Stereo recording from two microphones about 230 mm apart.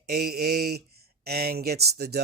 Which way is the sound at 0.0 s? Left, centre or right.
Right.